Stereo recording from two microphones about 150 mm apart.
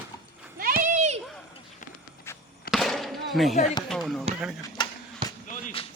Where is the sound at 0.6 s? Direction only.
70° right (ahead or behind); by 1.2 s 50° right (ahead or behind).